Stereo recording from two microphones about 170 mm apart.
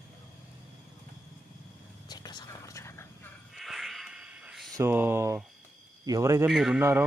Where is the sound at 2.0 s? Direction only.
25° left (ahead or behind).